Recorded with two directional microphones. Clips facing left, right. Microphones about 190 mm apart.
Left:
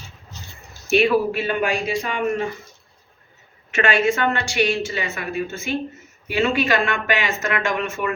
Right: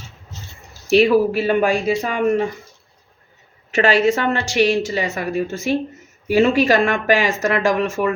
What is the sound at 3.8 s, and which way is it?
Speech, 35° right (ahead or behind).